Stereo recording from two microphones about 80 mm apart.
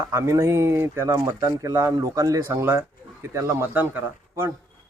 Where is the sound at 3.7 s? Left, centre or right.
Right.